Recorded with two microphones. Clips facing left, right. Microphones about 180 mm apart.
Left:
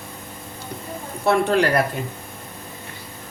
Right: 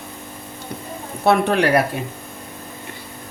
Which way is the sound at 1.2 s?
65° right (ahead or behind).